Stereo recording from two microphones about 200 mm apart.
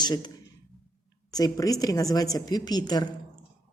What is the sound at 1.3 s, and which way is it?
Speech, 20° left (ahead or behind).